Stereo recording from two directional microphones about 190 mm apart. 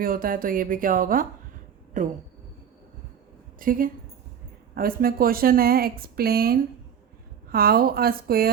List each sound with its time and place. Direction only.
0.0 s speech: 50° right (ahead or behind)
3.6 s speech: 45° right (ahead or behind)